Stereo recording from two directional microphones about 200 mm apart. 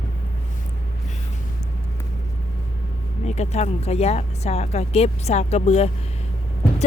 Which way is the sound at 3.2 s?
35° left (ahead or behind).